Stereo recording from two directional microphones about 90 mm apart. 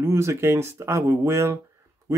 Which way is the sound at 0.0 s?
30° right (ahead or behind).